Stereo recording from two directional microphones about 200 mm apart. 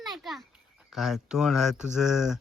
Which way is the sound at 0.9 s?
Centre (ahead or behind).